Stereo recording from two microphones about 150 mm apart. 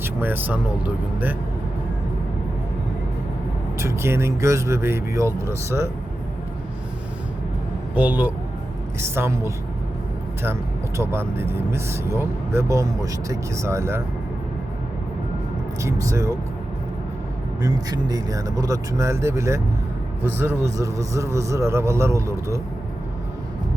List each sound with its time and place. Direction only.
0.0 s speech: 15° right (ahead or behind)
3.8 s a man's voice: 20° right (ahead or behind)
7.9 s speech: 10° right (ahead or behind)
15.8 s a man's voice: 20° right (ahead or behind)
17.6 s a man's voice: 25° right (ahead or behind)